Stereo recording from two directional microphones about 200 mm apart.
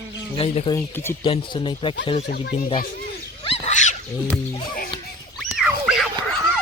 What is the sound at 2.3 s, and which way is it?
Speech, 50° left (ahead or behind).